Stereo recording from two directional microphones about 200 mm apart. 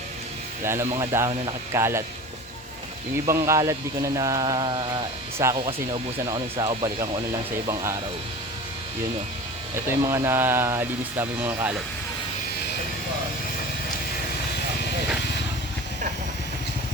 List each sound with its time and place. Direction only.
0.6 s speech: 10° right (ahead or behind)
3.2 s speech: 15° right (ahead or behind)
9.7 s speech: 15° right (ahead or behind)